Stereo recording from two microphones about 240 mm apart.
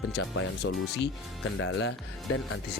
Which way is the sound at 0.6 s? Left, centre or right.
Left.